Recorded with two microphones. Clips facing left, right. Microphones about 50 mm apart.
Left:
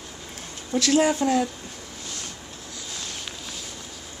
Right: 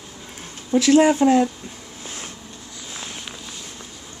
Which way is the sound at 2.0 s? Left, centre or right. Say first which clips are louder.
Right 3 dB; right.